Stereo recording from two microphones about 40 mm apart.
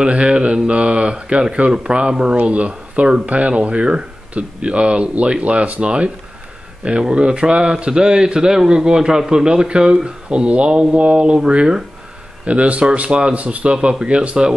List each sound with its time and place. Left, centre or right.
0.0 s a man's voice: right
2.3 s a man's voice: right
12.4 s a man's voice: right